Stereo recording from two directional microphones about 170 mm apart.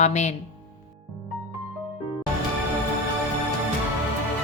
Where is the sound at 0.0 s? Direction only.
45° left (ahead or behind).